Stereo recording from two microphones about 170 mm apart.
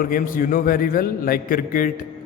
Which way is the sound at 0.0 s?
55° left (ahead or behind).